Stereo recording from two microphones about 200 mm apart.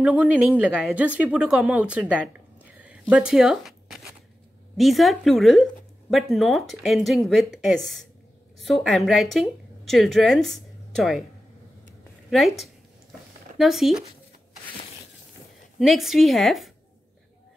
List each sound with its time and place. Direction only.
0.0 s a woman's voice: 5° right (ahead or behind)
12.3 s speech: centre (ahead or behind)
15.8 s speech: centre (ahead or behind)